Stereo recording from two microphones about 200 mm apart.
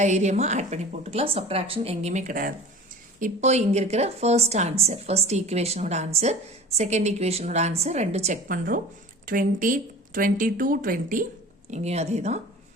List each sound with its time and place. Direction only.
0.0 s a woman's voice: 35° right (ahead or behind)